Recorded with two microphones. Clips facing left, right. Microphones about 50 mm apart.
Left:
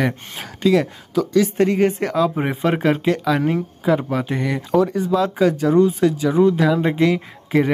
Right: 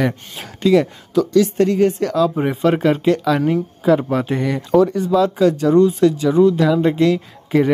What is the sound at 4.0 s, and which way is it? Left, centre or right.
Speech, centre.